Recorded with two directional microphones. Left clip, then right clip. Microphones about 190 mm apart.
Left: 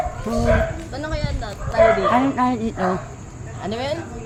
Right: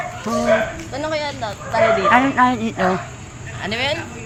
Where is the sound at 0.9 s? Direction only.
40° right (ahead or behind).